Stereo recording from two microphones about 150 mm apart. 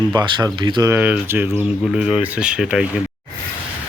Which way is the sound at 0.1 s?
30° right (ahead or behind).